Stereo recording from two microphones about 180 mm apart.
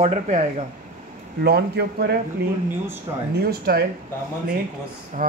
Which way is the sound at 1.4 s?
65° right (ahead or behind).